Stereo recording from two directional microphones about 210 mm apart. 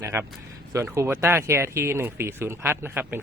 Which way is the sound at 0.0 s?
10° right (ahead or behind).